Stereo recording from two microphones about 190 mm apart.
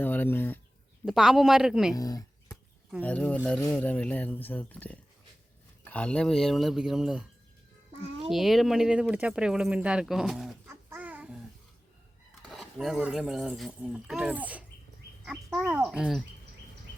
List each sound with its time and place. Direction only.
0.0 s a sound: 10° left (ahead or behind)
1.0 s speech: centre (ahead or behind)
2.0 s speech: 20° left (ahead or behind)
3.0 s speech: 10° left (ahead or behind)
8.3 s speech: centre (ahead or behind)
10.7 s babbling: 10° right (ahead or behind)
12.5 s speech: centre (ahead or behind)